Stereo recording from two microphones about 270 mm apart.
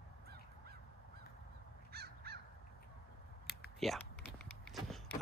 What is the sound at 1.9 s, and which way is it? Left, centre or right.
Crow, right.